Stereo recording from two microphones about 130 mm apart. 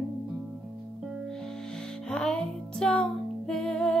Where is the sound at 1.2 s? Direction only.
5° left (ahead or behind).